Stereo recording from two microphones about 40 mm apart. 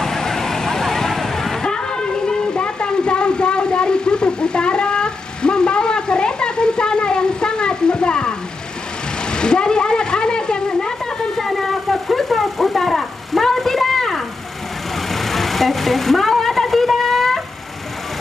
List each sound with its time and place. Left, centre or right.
0.0 s vehicle: centre
9.3 s a sound: left
15.0 s vehicle: centre